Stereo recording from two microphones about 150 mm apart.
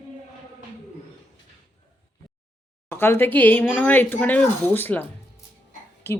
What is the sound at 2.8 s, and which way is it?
Speech, 15° left (ahead or behind).